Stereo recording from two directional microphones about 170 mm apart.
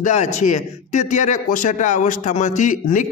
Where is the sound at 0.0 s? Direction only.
40° left (ahead or behind).